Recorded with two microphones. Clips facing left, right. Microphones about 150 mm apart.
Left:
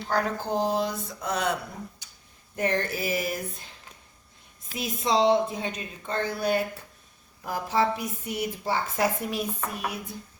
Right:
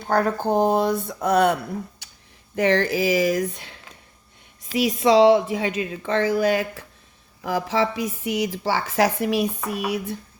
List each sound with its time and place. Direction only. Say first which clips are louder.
0.0 s speech: right 6 dB; 50° right (ahead or behind)
2.0 s a sound: right 4 dB; 70° right (ahead or behind)
2.6 s speech: right 7 dB; 90° right; by 9.5 s 75° right (ahead or behind)